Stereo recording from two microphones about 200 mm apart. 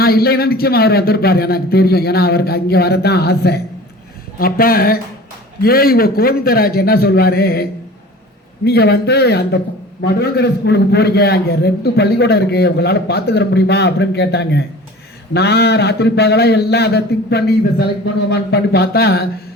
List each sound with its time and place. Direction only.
0.0 s a man's voice: 50° left (ahead or behind)